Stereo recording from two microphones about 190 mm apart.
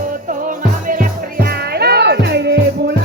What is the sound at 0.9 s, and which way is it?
Music, 50° right (ahead or behind).